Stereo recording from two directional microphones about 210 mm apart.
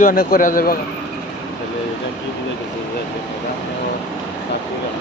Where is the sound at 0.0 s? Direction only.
45° left (ahead or behind).